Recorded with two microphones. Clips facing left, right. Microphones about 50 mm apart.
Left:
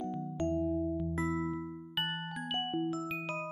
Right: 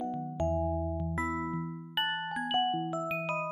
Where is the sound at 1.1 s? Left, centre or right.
Right.